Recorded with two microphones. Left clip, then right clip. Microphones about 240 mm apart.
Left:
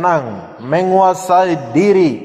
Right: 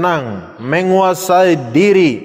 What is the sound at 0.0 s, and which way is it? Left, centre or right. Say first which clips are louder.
A man's voice: left 1 dB; right.